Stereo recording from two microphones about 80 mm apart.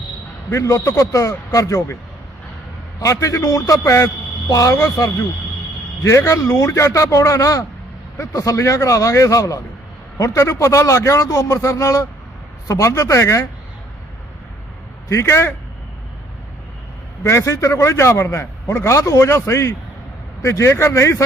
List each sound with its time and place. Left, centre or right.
0.5 s a man's voice: left
3.0 s a man's voice: left
15.1 s a man's voice: left
17.2 s a man's voice: left